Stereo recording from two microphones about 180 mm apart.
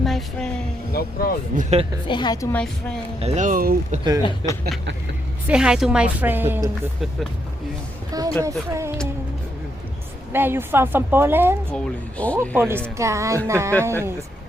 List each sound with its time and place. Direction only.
0.0 s a sound: centre (ahead or behind)
0.9 s speech: 55° left (ahead or behind)
1.5 s speech: 35° right (ahead or behind)
2.0 s a woman's voice: 25° left (ahead or behind)
2.5 s speech: 5° left (ahead or behind)
3.2 s speech: 40° right (ahead or behind)
4.2 s a woman's voice: 25° left (ahead or behind)
5.5 s speech: 5° right (ahead or behind)
8.1 s a sound: 20° right (ahead or behind)
8.4 s speech: 15° right (ahead or behind)
10.3 s speech: 10° right (ahead or behind)
11.7 s speech: 5° left (ahead or behind)
12.5 s speech: 10° right (ahead or behind)